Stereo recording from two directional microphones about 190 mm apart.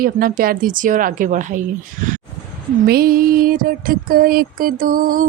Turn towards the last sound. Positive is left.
turn(degrees=-45)  # may be behind; listen again after turning